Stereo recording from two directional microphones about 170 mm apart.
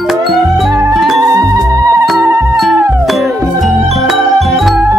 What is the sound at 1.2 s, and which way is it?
Music, 20° right (ahead or behind).